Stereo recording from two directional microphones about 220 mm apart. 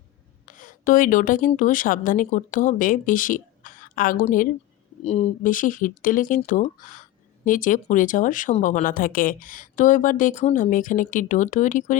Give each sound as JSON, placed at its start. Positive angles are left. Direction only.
{"t": 0.4, "sound": "speech", "side_deg": 35}